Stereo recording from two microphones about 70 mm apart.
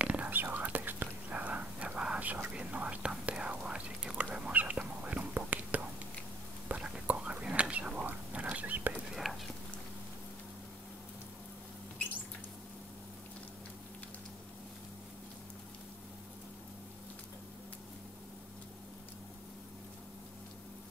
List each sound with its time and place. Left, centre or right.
0.0 s whispering: right
9.1 s whispering: centre